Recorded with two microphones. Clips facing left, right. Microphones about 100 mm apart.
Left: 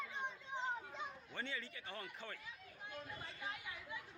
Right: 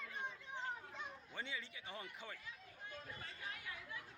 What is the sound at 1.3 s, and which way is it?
Speech, 10° right (ahead or behind).